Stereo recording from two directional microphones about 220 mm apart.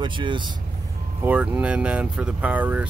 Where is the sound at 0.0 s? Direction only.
20° right (ahead or behind).